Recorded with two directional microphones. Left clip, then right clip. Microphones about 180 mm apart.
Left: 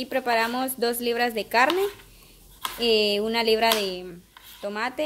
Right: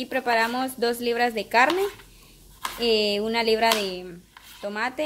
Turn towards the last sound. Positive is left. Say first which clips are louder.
# even
turn(degrees=5)  # may be behind; listen again after turning